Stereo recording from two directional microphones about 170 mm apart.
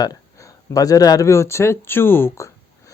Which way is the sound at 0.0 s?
20° left (ahead or behind).